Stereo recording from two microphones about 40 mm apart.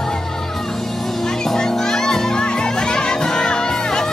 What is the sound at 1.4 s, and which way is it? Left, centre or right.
Music, centre.